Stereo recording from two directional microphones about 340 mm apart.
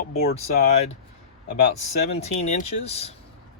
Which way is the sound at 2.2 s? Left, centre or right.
Centre.